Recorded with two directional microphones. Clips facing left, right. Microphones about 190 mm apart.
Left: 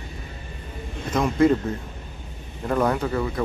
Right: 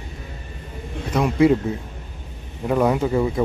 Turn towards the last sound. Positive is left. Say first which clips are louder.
# right 5 dB
turn(degrees=-20)  # may be behind; listen again after turning